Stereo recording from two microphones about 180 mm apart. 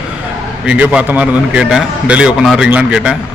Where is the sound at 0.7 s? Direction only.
5° right (ahead or behind).